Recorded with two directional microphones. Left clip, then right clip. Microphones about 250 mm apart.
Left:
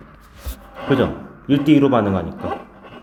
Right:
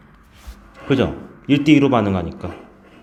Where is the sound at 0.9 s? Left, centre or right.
Centre.